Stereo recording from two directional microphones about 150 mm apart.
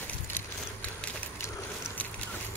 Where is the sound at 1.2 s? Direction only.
15° left (ahead or behind).